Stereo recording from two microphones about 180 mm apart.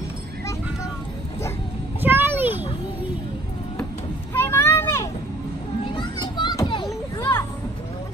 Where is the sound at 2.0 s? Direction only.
10° right (ahead or behind).